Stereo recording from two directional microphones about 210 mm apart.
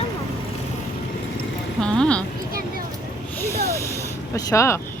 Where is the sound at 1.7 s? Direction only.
5° left (ahead or behind).